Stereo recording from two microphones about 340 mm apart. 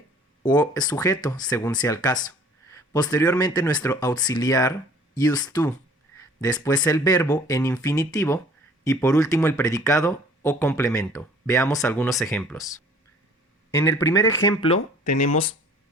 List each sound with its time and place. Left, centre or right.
0.4 s speech: centre